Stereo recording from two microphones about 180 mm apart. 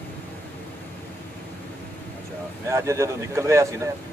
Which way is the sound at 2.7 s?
15° right (ahead or behind).